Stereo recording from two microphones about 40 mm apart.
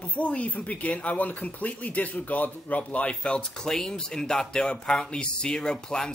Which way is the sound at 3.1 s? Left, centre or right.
Left.